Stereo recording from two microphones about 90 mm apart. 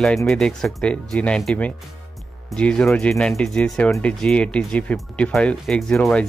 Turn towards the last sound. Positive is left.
turn(degrees=10)  # may be behind; listen again after turning